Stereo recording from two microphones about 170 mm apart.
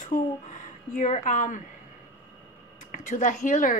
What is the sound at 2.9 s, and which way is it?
Speech, 45° left (ahead or behind).